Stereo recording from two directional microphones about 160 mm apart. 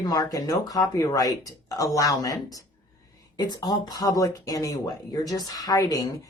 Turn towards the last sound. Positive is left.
turn(degrees=20)  # may be behind; listen again after turning